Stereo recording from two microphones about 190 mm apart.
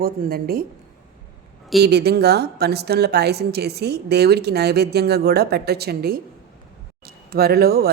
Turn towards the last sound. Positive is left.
turn(degrees=-55)  # may be behind; listen again after turning